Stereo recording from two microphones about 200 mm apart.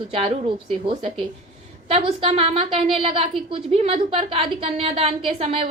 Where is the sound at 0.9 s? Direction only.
25° right (ahead or behind).